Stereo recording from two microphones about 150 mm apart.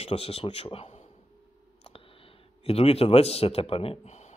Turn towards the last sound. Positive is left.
turn(degrees=45)  # may be behind; listen again after turning